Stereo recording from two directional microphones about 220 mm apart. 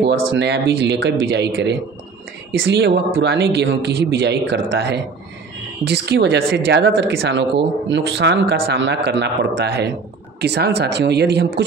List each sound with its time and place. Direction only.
0.0 s speech: 50° right (ahead or behind)